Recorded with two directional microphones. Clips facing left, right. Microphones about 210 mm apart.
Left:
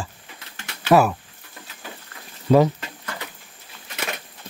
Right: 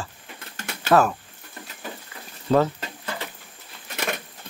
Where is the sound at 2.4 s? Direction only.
10° left (ahead or behind).